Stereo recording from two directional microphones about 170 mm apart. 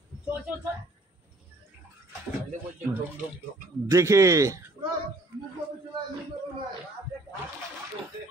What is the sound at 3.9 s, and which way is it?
Speech, 15° right (ahead or behind).